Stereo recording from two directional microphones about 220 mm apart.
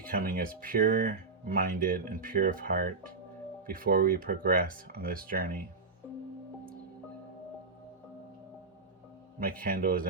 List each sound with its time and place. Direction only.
0.1 s speech: 40° right (ahead or behind)
9.6 s speech: 40° right (ahead or behind)